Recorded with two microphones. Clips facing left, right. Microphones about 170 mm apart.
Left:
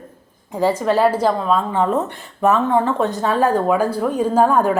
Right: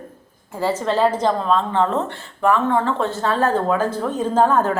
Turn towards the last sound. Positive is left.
turn(degrees=10)  # may be behind; listen again after turning